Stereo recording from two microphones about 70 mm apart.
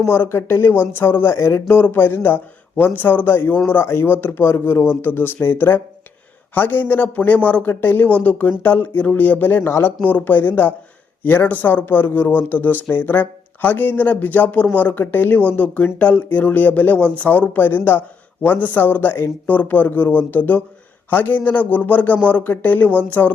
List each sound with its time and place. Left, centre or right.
0.0 s speech: left
1.7 s speech: left